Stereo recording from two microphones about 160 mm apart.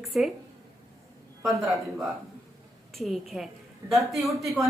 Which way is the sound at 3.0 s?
Centre (ahead or behind).